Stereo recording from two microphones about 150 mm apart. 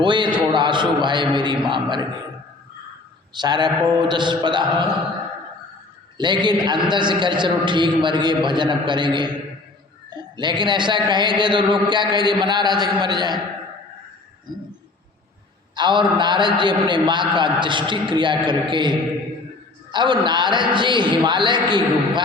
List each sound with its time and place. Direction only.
0.0 s a man's voice: 30° right (ahead or behind)
3.3 s a man's voice: 30° right (ahead or behind)
6.1 s a man's voice: 30° right (ahead or behind)
10.3 s a man's voice: 30° right (ahead or behind)
15.7 s a man's voice: 30° right (ahead or behind)